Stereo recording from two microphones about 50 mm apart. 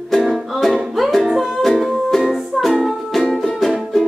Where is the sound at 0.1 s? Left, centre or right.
Centre.